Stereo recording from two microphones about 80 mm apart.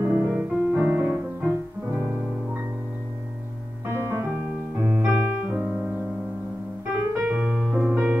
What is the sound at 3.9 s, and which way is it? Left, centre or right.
Piano, right.